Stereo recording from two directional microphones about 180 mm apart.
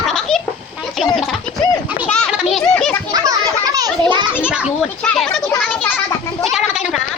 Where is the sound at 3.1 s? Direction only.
20° right (ahead or behind).